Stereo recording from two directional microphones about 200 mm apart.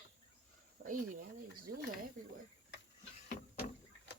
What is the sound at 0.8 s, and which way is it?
Cricket, 55° right (ahead or behind).